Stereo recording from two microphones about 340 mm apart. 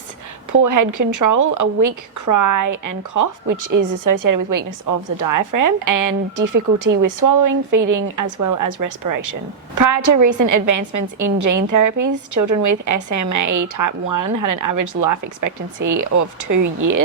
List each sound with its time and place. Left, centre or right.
0.5 s a woman's voice: right